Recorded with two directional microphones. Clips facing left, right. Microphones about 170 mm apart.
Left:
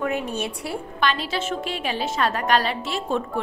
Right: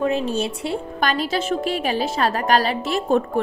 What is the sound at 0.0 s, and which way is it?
Speech, 30° right (ahead or behind).